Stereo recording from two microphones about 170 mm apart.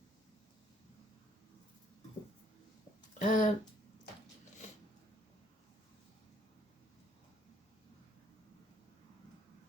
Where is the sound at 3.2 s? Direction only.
50° left (ahead or behind).